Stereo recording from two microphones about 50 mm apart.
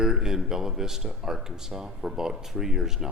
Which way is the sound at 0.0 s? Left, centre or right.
Centre.